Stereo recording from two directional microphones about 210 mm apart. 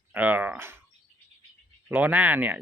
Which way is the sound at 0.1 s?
10° right (ahead or behind).